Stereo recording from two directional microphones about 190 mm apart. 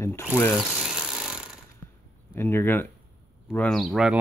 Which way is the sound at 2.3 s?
10° left (ahead or behind).